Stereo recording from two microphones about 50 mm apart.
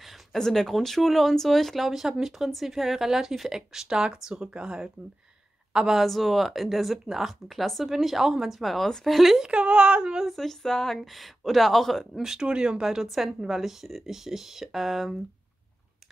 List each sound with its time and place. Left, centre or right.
0.0 s speech: centre
1.9 s a woman's voice: centre
5.9 s speech: centre
9.4 s a woman's voice: right
10.3 s speech: centre
12.2 s speech: centre